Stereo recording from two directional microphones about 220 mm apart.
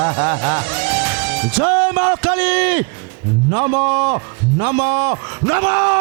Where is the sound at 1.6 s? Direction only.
20° right (ahead or behind).